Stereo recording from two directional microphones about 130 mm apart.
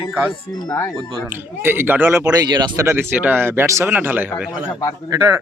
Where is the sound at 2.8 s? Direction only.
20° right (ahead or behind).